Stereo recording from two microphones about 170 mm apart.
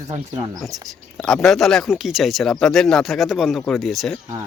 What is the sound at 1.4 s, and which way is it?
Speech, centre (ahead or behind).